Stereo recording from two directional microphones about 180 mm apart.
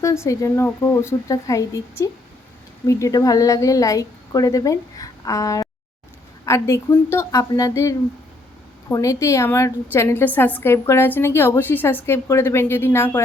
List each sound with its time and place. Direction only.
0.0 s a woman's voice: 15° left (ahead or behind)